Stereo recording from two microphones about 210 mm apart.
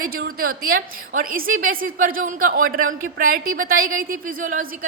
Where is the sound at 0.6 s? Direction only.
45° right (ahead or behind).